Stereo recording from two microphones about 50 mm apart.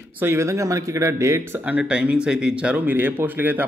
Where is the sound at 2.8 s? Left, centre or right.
Right.